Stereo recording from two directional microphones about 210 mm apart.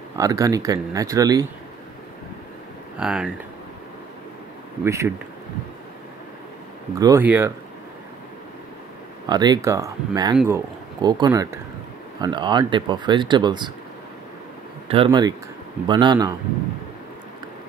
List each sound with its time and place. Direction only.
0.1 s speech: 15° right (ahead or behind)
3.0 s speech: 5° right (ahead or behind)
4.8 s speech: 15° right (ahead or behind)
7.0 s speech: 15° right (ahead or behind)
9.2 s speech: 20° right (ahead or behind)
14.9 s speech: 25° right (ahead or behind)